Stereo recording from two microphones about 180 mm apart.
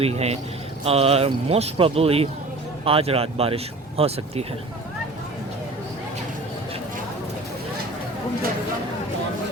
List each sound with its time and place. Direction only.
0.0 s speech: 35° right (ahead or behind)